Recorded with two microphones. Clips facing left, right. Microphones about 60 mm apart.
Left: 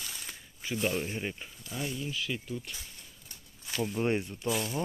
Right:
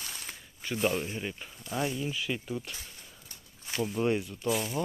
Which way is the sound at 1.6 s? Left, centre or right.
Right.